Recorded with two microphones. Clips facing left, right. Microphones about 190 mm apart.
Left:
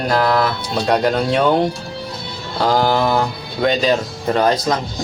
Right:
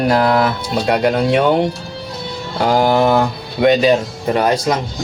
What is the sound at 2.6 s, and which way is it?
Speech, 15° right (ahead or behind).